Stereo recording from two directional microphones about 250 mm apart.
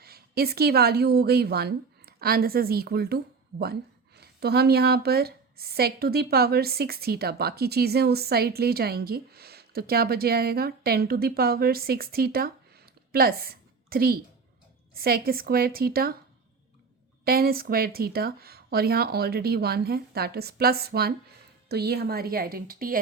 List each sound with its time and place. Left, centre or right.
0.0 s a woman's voice: right
17.2 s speech: right